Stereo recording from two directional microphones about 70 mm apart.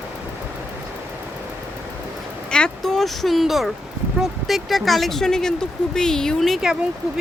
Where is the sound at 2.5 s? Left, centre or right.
Centre.